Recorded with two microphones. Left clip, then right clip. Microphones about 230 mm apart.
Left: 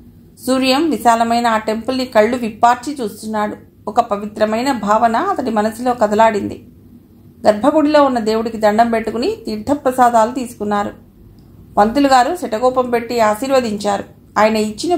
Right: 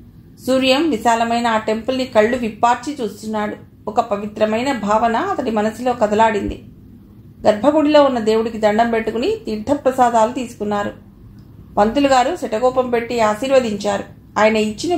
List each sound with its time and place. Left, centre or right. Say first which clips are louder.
0.5 s a woman's voice: even; left
7.4 s a woman's voice: left 1 dB; left